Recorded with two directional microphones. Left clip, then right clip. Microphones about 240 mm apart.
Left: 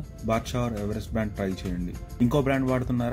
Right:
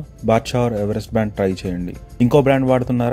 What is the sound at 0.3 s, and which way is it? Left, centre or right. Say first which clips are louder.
Speech: right 11 dB; right.